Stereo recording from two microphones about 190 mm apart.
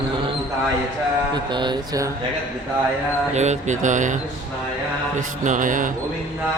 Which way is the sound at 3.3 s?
35° right (ahead or behind).